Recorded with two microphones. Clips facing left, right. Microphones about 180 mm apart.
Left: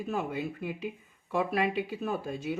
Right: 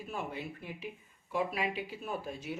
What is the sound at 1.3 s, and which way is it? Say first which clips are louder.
Speech: left 5 dB; 70° left (ahead or behind).